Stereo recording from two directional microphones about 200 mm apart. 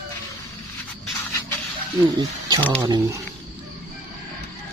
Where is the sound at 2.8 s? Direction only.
15° right (ahead or behind).